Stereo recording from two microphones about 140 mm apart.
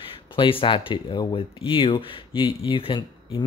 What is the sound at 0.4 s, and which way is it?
Speech, 40° left (ahead or behind).